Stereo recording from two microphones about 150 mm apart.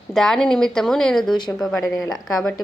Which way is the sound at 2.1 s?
5° left (ahead or behind).